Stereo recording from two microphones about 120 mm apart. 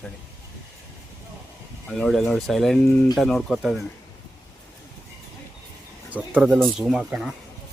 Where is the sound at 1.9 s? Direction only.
5° left (ahead or behind).